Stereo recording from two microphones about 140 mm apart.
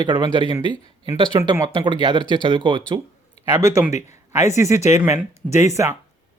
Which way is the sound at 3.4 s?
50° left (ahead or behind).